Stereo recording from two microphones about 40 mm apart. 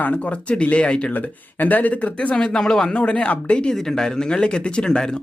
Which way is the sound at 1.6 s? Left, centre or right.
Left.